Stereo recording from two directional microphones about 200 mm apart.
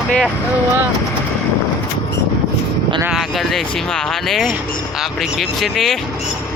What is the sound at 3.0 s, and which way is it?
Speech, centre (ahead or behind).